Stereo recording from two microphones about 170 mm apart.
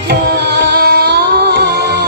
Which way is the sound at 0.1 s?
70° right (ahead or behind).